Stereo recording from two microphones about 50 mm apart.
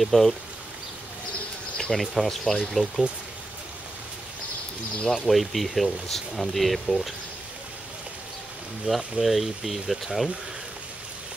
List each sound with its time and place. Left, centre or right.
0.0 s speech: centre
1.8 s speech: centre
5.0 s speech: centre
8.9 s speech: centre
9.2 s speech: centre